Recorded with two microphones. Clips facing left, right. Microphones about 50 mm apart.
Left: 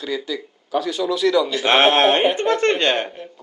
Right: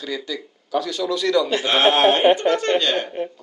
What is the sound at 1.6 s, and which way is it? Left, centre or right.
A man's voice, left.